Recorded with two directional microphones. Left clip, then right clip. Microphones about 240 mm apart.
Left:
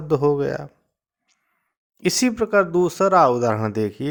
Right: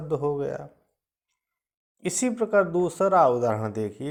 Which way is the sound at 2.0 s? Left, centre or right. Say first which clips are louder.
Left 6 dB; left.